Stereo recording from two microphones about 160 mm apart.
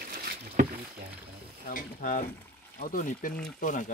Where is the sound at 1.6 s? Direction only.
55° left (ahead or behind).